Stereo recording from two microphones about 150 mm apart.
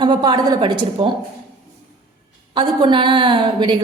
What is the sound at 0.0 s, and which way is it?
A woman's voice, 30° right (ahead or behind).